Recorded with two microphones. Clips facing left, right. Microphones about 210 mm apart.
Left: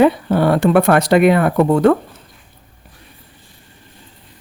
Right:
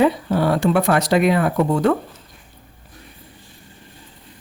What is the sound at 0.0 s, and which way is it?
Speech, 60° left (ahead or behind).